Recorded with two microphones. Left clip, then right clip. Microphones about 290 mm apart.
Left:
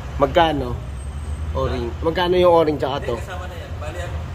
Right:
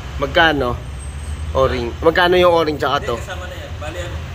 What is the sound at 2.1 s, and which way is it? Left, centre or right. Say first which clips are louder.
Speech: right 1 dB; centre.